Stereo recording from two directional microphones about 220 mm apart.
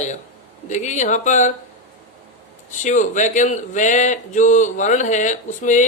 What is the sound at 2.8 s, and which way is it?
Speech, 35° left (ahead or behind).